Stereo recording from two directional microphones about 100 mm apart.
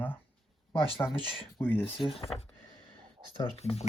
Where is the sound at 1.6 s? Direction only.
20° left (ahead or behind).